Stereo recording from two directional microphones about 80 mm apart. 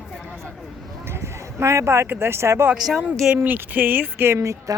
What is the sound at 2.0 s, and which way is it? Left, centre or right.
Speech, right.